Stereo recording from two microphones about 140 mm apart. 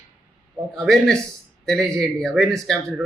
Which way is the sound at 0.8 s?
Centre (ahead or behind).